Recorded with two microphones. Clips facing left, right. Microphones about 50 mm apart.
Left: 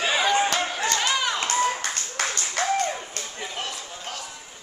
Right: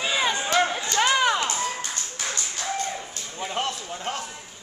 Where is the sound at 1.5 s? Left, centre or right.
Left.